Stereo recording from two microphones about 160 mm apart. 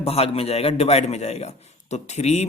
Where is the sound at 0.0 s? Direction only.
40° left (ahead or behind).